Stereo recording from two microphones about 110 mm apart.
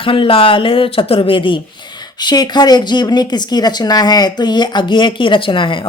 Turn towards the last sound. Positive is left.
turn(degrees=50)  # may be behind; listen again after turning